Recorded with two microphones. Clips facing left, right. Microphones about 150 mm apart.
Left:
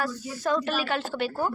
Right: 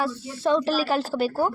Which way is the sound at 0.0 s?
30° right (ahead or behind).